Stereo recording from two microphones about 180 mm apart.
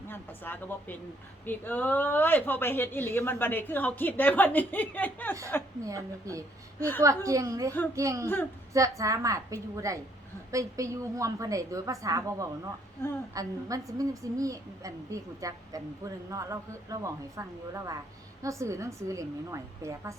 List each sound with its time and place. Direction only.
0.1 s speech: 10° left (ahead or behind)
5.8 s a woman's voice: 20° right (ahead or behind)
13.0 s speech: 15° left (ahead or behind)
13.3 s a woman's voice: 20° right (ahead or behind)